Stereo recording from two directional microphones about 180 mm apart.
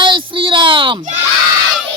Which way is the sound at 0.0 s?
25° right (ahead or behind).